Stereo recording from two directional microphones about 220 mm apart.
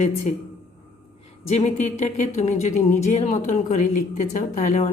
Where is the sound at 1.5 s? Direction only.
30° left (ahead or behind).